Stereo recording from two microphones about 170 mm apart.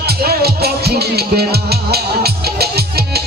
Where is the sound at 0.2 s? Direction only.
65° right (ahead or behind).